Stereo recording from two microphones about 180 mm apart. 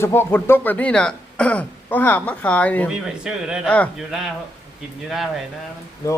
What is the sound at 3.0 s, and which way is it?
Speech, 5° right (ahead or behind).